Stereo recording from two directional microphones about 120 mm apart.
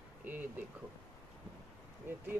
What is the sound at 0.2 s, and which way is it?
Speech, 15° right (ahead or behind).